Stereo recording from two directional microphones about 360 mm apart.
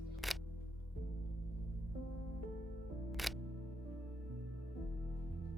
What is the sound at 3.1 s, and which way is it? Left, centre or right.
Music, centre.